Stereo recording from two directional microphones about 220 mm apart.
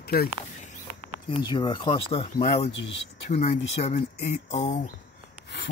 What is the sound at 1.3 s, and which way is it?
Speech, 20° left (ahead or behind).